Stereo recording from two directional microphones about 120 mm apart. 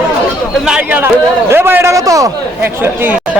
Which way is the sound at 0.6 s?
5° right (ahead or behind).